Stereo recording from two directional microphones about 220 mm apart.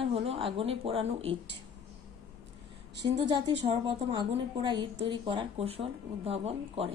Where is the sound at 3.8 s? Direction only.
20° right (ahead or behind).